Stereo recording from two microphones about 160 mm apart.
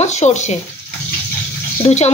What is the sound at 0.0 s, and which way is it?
Speech, 45° left (ahead or behind).